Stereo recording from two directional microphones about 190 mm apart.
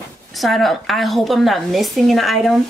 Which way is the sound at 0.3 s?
Centre (ahead or behind).